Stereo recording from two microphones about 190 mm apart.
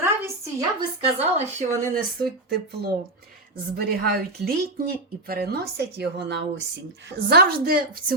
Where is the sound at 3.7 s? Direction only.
55° right (ahead or behind).